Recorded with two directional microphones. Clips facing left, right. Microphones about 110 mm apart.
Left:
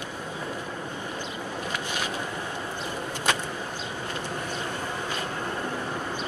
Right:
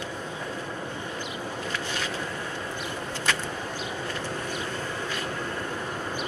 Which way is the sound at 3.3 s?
20° left (ahead or behind).